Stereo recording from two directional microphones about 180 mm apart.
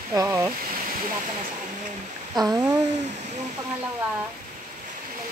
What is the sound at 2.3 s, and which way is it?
Speech, 20° right (ahead or behind).